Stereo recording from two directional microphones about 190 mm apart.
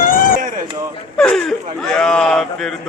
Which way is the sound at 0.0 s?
45° left (ahead or behind).